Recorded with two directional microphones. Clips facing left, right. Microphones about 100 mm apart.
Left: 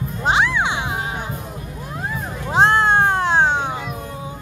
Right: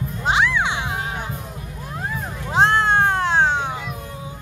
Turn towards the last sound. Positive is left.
turn(degrees=15)  # may be behind; listen again after turning